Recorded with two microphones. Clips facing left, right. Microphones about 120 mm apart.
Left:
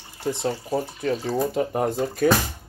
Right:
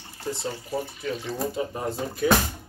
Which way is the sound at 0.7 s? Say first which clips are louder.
Left 3 dB; 40° left (ahead or behind).